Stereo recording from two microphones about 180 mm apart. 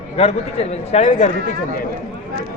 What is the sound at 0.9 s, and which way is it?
Speech, 45° left (ahead or behind).